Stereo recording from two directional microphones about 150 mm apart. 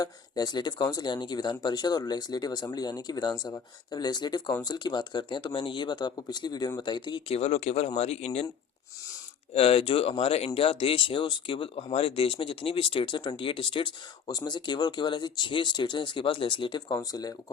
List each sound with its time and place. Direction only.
0.0 s speech: 25° left (ahead or behind); by 8.4 s 45° left (ahead or behind)
9.6 s speech: 40° left (ahead or behind); by 17.3 s 25° left (ahead or behind)